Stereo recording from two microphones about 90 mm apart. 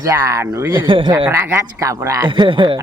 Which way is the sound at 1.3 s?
25° right (ahead or behind).